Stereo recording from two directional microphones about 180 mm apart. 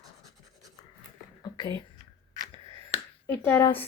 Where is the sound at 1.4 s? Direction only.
25° left (ahead or behind).